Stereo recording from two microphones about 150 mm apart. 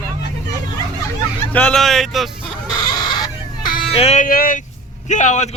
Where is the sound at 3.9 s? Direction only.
45° left (ahead or behind).